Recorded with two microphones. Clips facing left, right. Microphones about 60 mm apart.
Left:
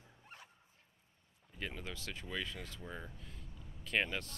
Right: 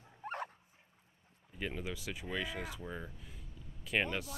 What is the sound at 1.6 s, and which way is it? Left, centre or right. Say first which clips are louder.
Speech: right 4 dB; centre.